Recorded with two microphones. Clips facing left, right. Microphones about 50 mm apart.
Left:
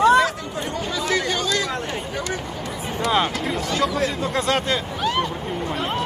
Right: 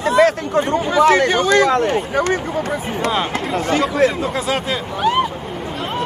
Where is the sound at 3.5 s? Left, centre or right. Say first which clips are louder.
Right 7 dB; right.